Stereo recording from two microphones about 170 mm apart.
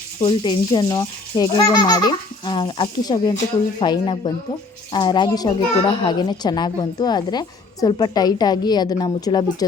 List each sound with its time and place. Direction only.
0.2 s a child's voice: 25° left (ahead or behind)